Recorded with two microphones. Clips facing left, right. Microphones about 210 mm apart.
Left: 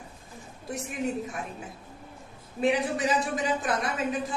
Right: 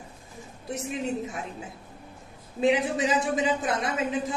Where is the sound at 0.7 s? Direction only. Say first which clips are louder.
Right 1 dB; 25° right (ahead or behind).